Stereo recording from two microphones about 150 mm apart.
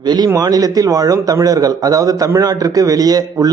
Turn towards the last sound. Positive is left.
turn(degrees=-25)  # may be behind; listen again after turning